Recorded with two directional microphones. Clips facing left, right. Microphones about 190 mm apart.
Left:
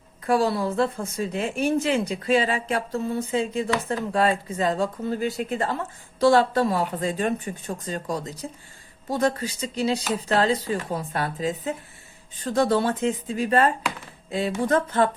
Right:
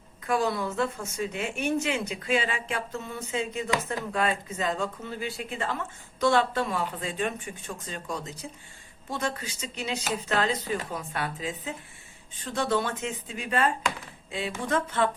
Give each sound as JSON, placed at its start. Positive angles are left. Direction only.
{"t": 0.3, "sound": "speech", "side_deg": 35}